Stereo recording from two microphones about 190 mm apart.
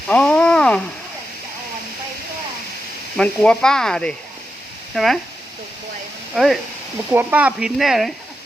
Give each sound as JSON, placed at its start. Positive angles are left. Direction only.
{"t": 0.1, "sound": "a sound", "side_deg": 5}
{"t": 3.2, "sound": "speech", "side_deg": 5}
{"t": 6.3, "sound": "speech", "side_deg": 0}